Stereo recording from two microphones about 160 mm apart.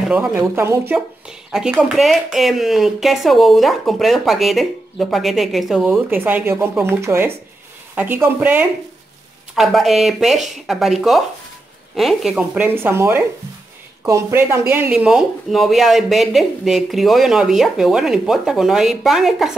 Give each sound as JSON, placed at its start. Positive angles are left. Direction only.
{"t": 0.1, "sound": "speech", "side_deg": -10}
{"t": 1.5, "sound": "speech", "side_deg": -5}
{"t": 5.9, "sound": "speech", "side_deg": -10}
{"t": 9.6, "sound": "speech", "side_deg": 0}